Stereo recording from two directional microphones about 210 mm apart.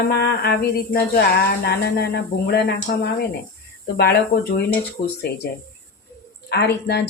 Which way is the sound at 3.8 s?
50° left (ahead or behind).